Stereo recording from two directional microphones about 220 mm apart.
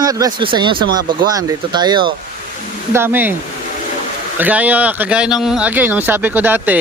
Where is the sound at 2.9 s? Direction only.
10° right (ahead or behind).